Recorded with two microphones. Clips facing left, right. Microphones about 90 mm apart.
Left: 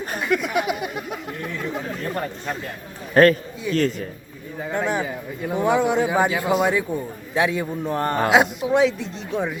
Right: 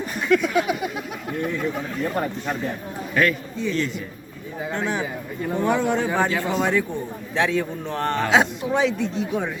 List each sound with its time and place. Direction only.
0.2 s a sound: 5° left (ahead or behind)
3.2 s a man's voice: 40° left (ahead or behind)
4.7 s a woman's voice: 5° left (ahead or behind)